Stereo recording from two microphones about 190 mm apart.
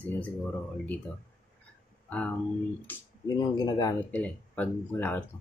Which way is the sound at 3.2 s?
20° left (ahead or behind).